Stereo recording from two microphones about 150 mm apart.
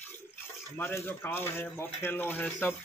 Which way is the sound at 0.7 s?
15° left (ahead or behind).